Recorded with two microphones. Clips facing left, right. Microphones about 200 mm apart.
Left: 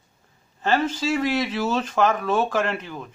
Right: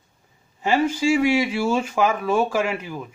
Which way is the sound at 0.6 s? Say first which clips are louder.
Right 2 dB; 10° right (ahead or behind).